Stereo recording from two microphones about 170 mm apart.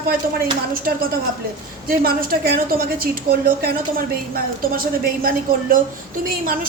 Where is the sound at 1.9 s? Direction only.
60° right (ahead or behind).